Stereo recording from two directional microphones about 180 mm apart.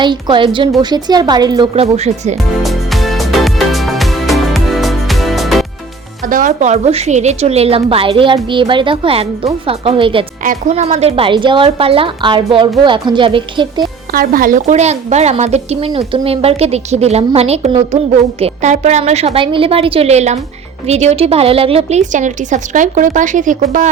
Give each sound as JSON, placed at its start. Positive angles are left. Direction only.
{"t": 0.0, "sound": "a woman's voice", "side_deg": -25}
{"t": 1.7, "sound": "a woman's voice", "side_deg": -35}
{"t": 2.6, "sound": "music", "side_deg": 0}
{"t": 6.2, "sound": "a woman's voice", "side_deg": -50}
{"t": 10.4, "sound": "a woman's voice", "side_deg": -45}
{"t": 14.1, "sound": "a woman's voice", "side_deg": -50}